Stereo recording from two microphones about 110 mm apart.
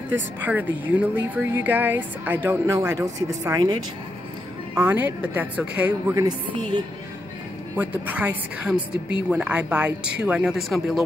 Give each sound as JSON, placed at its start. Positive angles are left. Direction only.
{"t": 0.1, "sound": "a woman's voice", "side_deg": -15}
{"t": 4.7, "sound": "a woman's voice", "side_deg": -15}
{"t": 7.7, "sound": "a woman's voice", "side_deg": -15}